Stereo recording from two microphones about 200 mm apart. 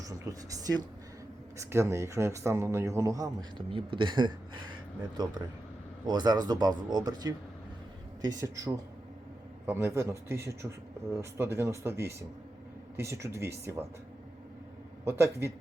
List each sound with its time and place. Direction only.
0.0 s speech: 15° right (ahead or behind)
15.0 s speech: 15° right (ahead or behind)